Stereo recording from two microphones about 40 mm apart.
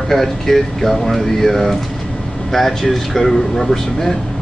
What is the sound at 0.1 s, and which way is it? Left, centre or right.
Speech, centre.